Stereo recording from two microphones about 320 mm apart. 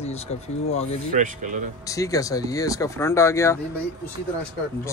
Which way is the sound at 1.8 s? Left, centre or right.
Centre.